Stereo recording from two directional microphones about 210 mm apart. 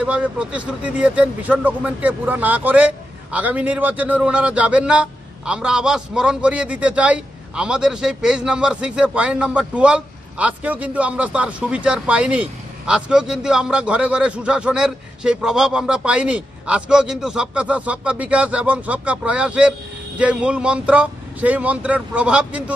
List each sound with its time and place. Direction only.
0.0 s speech: 5° right (ahead or behind)